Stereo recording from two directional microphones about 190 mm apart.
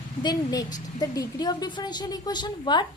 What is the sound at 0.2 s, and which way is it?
A woman's voice, 20° left (ahead or behind).